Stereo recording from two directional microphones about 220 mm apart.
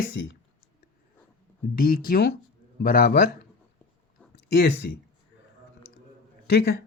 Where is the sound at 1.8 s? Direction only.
40° left (ahead or behind).